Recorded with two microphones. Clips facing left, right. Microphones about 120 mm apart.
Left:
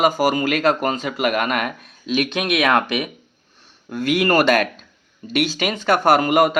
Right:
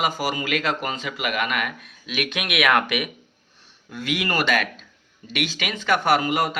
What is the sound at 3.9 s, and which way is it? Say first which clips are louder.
Speech: left 8 dB; 45° left (ahead or behind).